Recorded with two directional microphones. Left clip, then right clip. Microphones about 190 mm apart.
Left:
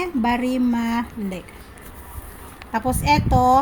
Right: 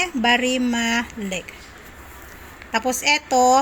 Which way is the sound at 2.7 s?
5° right (ahead or behind).